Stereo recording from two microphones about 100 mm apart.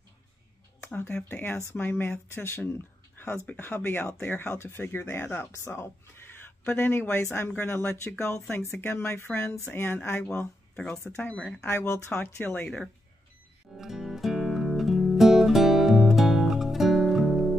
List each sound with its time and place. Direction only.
0.8 s speech: 20° left (ahead or behind)
11.6 s speech: 25° left (ahead or behind)
12.6 s speech: 5° left (ahead or behind)
13.7 s music: 5° right (ahead or behind)